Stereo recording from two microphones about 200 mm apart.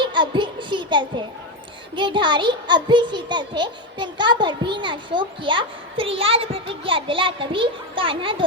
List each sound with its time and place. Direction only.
0.0 s music: 25° right (ahead or behind)
2.0 s a child's voice: 25° right (ahead or behind)